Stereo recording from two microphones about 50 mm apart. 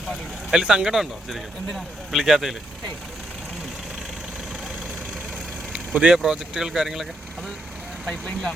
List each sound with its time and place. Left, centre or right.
0.5 s speech: centre
1.6 s speech: centre
5.7 s vehicle: right
6.1 s speech: centre